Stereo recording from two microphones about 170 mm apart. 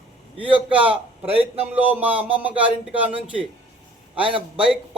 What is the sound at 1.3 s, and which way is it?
Speech, 35° right (ahead or behind).